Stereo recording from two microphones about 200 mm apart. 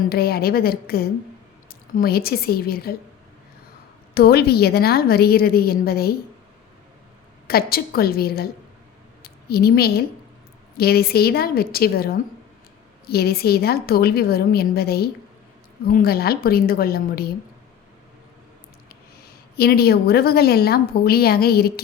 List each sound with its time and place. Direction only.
0.0 s a woman's voice: 50° left (ahead or behind)
4.1 s a woman's voice: 50° left (ahead or behind)
7.4 s a woman's voice: 50° left (ahead or behind)
9.2 s a sound: 50° left (ahead or behind)
10.8 s a woman's voice: 50° left (ahead or behind)
19.5 s a woman's voice: 50° left (ahead or behind)